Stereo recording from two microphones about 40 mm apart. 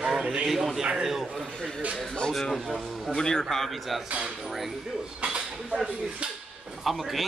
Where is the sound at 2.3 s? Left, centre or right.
Centre.